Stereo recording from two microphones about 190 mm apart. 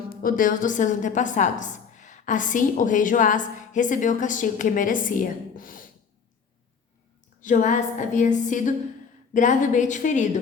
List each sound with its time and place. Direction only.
0.1 s a woman's voice: 45° left (ahead or behind)
7.4 s a woman's voice: 40° left (ahead or behind)